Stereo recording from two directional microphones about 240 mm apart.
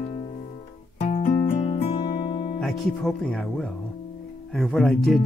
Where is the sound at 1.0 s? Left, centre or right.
Left.